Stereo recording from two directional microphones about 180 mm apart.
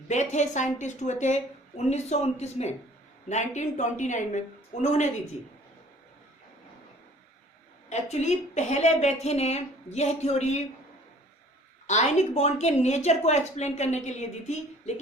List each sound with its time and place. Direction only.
0.1 s a woman's voice: 40° left (ahead or behind)
7.9 s a woman's voice: 40° left (ahead or behind)
11.9 s a woman's voice: 40° left (ahead or behind)